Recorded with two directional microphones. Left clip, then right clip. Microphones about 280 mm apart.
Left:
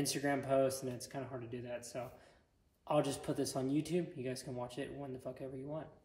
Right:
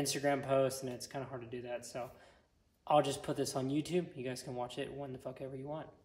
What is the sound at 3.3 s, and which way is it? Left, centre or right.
Speech, centre.